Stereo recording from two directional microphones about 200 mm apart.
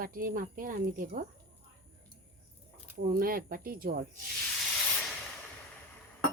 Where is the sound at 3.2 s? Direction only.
45° right (ahead or behind).